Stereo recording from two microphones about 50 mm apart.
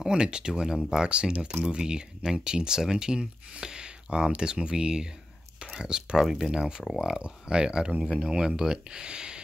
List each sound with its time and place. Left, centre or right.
0.0 s speech: centre
6.2 s speech: centre
6.5 s speech: centre